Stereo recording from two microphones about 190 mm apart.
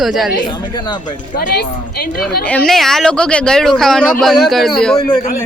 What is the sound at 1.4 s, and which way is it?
Speech, 55° left (ahead or behind).